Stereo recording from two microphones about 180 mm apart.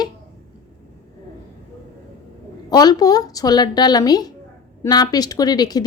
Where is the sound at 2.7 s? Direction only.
20° left (ahead or behind).